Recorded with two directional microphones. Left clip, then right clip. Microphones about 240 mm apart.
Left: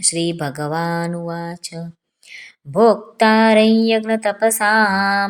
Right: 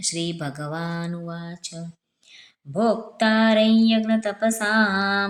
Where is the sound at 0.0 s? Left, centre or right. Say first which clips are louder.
Left 7 dB; centre.